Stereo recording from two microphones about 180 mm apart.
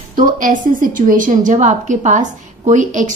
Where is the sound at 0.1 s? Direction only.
50° right (ahead or behind).